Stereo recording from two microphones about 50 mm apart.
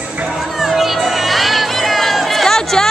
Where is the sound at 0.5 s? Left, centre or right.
Centre.